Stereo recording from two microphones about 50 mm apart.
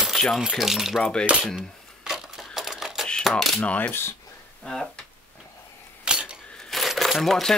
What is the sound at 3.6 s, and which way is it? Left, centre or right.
Speech, left.